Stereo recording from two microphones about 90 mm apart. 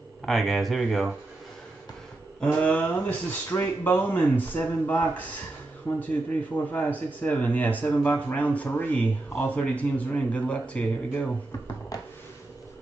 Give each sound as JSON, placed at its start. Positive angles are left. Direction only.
{"t": 0.2, "sound": "speech", "side_deg": 0}
{"t": 2.4, "sound": "speech", "side_deg": 15}
{"t": 6.5, "sound": "speech", "side_deg": 20}